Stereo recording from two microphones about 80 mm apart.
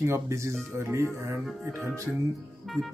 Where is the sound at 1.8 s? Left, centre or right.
Right.